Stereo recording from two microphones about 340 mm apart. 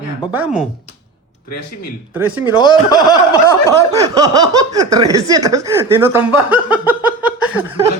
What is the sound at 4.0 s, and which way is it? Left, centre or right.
Speech, centre.